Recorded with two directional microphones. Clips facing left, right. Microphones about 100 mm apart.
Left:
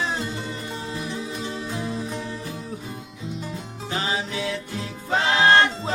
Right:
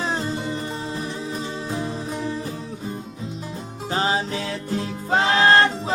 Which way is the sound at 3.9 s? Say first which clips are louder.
Right 4 dB; 35° right (ahead or behind).